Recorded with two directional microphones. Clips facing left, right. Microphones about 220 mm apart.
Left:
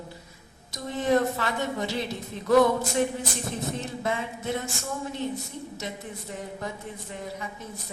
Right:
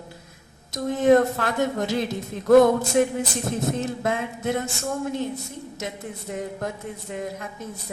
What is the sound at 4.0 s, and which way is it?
Speech, 50° right (ahead or behind).